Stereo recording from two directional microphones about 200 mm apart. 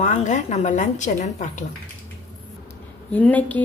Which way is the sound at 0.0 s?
35° left (ahead or behind).